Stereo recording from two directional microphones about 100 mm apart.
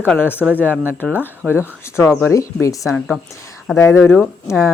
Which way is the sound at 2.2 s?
30° left (ahead or behind).